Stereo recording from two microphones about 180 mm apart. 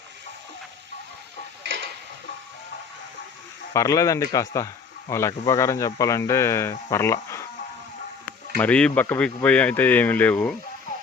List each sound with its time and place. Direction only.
3.7 s a man's voice: 20° left (ahead or behind)
8.5 s a man's voice: 5° left (ahead or behind)